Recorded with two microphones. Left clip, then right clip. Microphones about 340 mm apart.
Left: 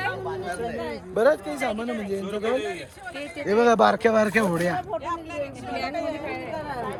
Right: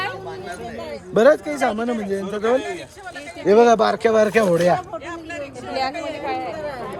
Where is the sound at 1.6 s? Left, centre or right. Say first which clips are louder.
Right 6 dB; right.